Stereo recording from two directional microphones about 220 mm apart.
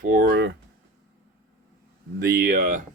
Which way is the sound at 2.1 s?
45° right (ahead or behind).